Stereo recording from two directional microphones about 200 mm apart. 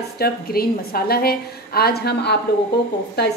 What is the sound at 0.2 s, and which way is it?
A woman's voice, 50° left (ahead or behind).